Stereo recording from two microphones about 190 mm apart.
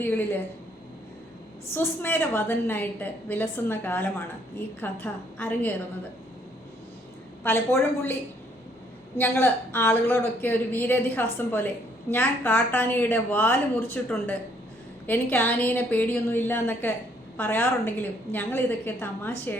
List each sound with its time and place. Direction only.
0.0 s a woman's voice: 10° left (ahead or behind)
1.7 s a woman's voice: 10° left (ahead or behind)
7.4 s a woman's voice: 10° left (ahead or behind)
9.1 s a woman's voice: 10° left (ahead or behind)